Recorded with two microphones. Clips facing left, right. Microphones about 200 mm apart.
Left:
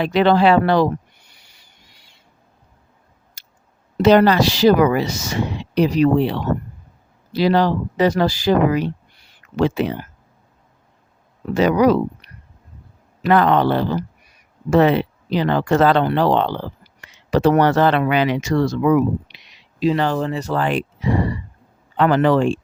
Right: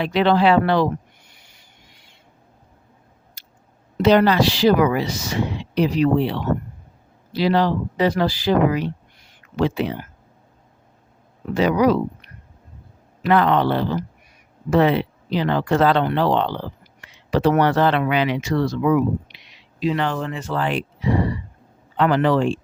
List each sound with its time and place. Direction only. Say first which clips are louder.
0.0 s owl: left 2 dB; 45° left (ahead or behind)
3.4 s a sound: right 2 dB; 45° left (ahead or behind)
3.9 s speech: left 2 dB; 45° left (ahead or behind)
11.5 s speech: left 2 dB; 45° left (ahead or behind)
19.3 s a sound: even; 30° left (ahead or behind)
19.8 s speech: left 4 dB; 35° left (ahead or behind); by 22.6 s 50° left (ahead or behind)